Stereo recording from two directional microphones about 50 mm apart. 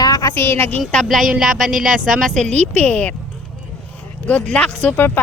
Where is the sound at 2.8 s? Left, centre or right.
Left.